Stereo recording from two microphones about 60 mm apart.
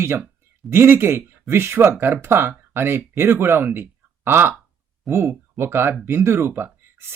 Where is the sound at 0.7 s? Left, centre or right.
Right.